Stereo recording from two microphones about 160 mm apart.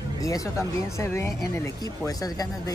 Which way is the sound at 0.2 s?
20° left (ahead or behind).